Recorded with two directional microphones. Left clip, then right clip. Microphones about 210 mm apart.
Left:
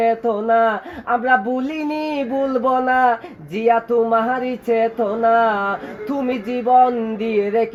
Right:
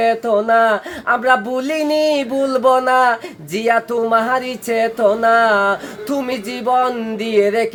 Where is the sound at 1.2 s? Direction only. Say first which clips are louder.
Even; 15° right (ahead or behind).